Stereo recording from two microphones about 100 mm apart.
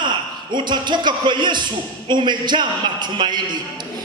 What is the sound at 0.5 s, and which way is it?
Speech, 50° right (ahead or behind).